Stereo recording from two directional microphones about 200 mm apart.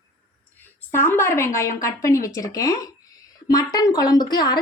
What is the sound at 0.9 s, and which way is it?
A woman's voice, 10° left (ahead or behind).